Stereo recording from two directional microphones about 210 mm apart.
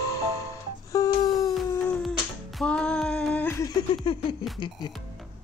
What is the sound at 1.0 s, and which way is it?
Wail, 15° left (ahead or behind).